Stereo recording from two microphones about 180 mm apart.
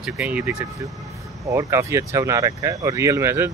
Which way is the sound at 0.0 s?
5° right (ahead or behind).